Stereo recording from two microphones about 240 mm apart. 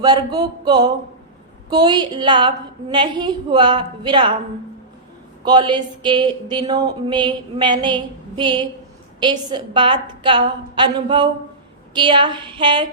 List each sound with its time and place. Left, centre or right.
0.0 s a sound: centre
1.7 s speech: centre
5.5 s speech: centre